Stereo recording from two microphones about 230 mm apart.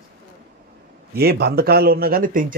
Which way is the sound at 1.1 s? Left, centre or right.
Right.